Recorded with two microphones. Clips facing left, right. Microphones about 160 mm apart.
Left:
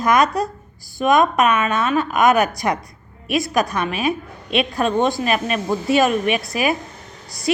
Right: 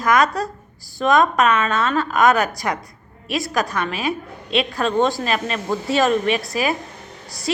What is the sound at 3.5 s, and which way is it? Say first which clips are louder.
A woman's voice: left 2 dB; 15° left (ahead or behind).